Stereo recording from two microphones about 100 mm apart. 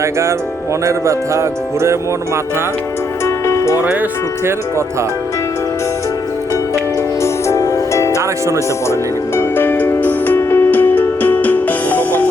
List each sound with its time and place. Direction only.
0.0 s speech: 30° right (ahead or behind)
3.2 s music: 30° left (ahead or behind)
7.2 s music: 30° left (ahead or behind)